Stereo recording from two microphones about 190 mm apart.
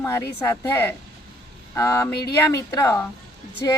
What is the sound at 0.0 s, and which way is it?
Speech, 15° left (ahead or behind).